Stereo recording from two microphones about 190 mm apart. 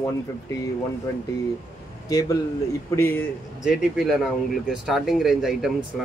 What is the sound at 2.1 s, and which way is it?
A man's voice, 20° left (ahead or behind).